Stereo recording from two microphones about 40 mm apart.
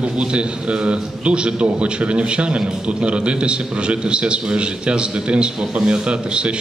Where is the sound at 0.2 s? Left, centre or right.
Right.